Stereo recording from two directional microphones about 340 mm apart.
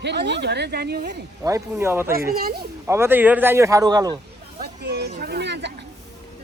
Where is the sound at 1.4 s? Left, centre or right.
Centre.